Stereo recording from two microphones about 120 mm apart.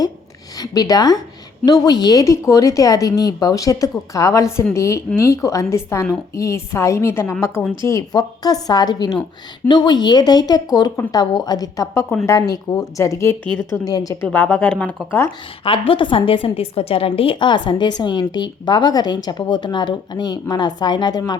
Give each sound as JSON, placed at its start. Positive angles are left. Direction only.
{"t": 0.6, "sound": "a woman's voice", "side_deg": 30}
{"t": 14.3, "sound": "speech", "side_deg": 10}
{"t": 15.6, "sound": "a woman's voice", "side_deg": 45}